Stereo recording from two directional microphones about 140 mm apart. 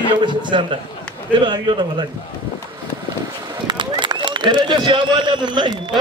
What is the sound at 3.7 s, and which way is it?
A man's voice, 35° right (ahead or behind).